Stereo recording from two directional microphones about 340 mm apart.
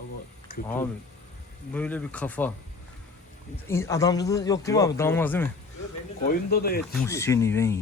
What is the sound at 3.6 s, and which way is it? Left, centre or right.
Speech, centre.